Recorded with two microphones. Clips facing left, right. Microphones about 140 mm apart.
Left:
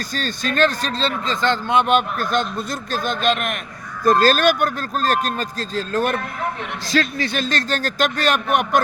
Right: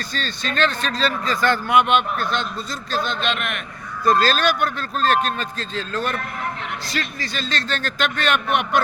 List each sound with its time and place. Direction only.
0.0 s speech: 45° left (ahead or behind); by 1.9 s 25° left (ahead or behind)
1.9 s speech: 40° left (ahead or behind)
6.8 s speech: 75° left (ahead or behind); by 8.8 s 45° left (ahead or behind)